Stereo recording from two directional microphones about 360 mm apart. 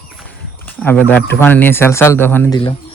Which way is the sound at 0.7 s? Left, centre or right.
Centre.